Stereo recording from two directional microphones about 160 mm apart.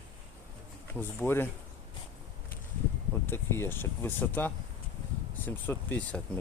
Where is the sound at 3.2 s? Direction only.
15° left (ahead or behind).